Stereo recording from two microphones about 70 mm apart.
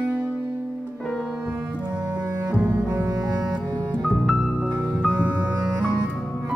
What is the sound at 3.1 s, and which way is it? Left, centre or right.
Music, right.